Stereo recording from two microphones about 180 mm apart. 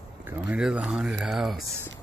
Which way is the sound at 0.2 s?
10° right (ahead or behind).